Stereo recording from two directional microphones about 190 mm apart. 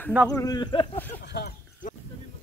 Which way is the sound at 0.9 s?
10° left (ahead or behind).